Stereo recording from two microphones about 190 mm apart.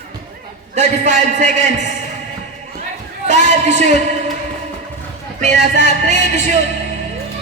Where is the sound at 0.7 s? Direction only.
40° right (ahead or behind).